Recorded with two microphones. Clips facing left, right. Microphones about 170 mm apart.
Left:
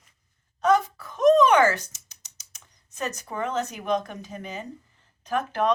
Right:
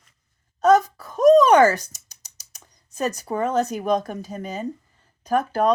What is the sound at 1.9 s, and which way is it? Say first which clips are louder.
Speech: right 4 dB; 40° right (ahead or behind).